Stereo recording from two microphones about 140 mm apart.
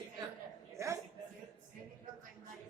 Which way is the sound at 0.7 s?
20° right (ahead or behind).